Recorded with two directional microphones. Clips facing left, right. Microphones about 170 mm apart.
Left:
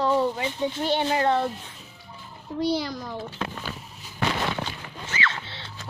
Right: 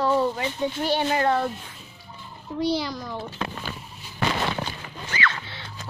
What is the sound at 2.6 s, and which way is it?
Speech, 55° left (ahead or behind).